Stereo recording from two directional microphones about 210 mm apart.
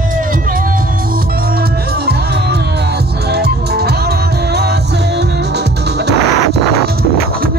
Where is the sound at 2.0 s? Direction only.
50° right (ahead or behind).